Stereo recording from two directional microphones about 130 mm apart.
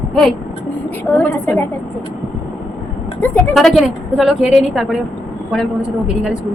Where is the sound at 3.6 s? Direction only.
Centre (ahead or behind).